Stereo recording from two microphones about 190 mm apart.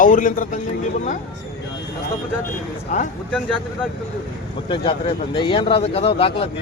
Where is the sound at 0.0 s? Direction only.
45° left (ahead or behind).